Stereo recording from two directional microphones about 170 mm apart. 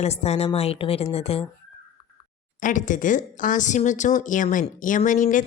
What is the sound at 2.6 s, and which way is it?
Speech, 50° left (ahead or behind).